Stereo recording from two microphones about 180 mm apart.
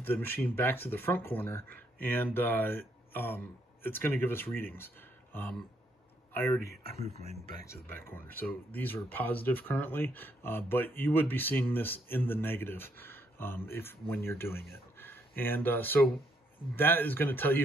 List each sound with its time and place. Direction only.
0.0 s speech: 10° left (ahead or behind)
6.8 s speech: 35° left (ahead or behind)
7.6 s speech: 15° left (ahead or behind)